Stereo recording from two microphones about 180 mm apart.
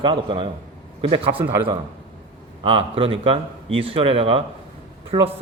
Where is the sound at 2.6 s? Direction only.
30° right (ahead or behind).